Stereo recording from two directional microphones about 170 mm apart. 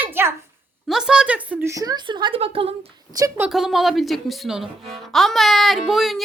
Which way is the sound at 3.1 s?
20° right (ahead or behind).